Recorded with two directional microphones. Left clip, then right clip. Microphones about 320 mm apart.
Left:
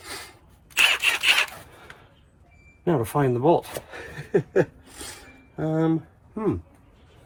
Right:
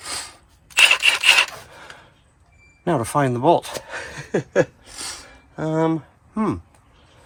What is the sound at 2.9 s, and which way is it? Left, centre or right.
Speech, right.